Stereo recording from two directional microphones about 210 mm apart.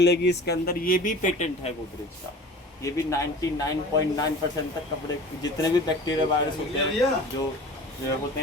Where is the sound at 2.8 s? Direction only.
15° left (ahead or behind).